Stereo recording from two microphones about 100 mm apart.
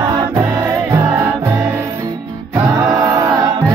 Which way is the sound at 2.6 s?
35° right (ahead or behind).